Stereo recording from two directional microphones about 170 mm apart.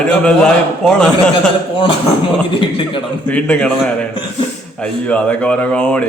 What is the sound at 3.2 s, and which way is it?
Speech, 10° left (ahead or behind).